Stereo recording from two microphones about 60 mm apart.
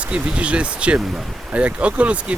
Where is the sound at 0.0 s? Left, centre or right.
Centre.